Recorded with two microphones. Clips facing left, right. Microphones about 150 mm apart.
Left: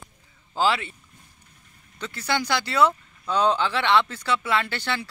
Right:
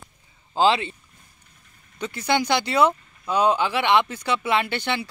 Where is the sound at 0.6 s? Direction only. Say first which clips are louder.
Right 4 dB; 20° right (ahead or behind).